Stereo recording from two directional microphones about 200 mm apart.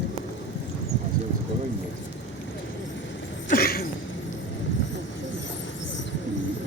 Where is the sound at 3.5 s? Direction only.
50° left (ahead or behind).